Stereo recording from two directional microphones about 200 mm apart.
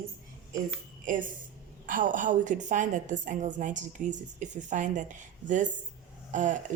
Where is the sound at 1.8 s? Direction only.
40° right (ahead or behind).